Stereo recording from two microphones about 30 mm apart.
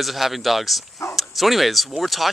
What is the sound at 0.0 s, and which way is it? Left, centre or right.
Speech, centre.